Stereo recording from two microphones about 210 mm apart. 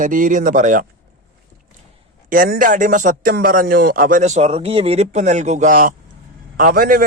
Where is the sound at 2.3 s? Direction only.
40° right (ahead or behind).